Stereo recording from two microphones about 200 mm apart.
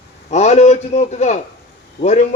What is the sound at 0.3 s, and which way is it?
A man's voice, 35° left (ahead or behind).